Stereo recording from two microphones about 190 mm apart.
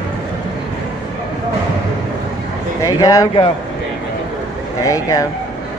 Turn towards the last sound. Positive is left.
turn(degrees=20)  # may be behind; listen again after turning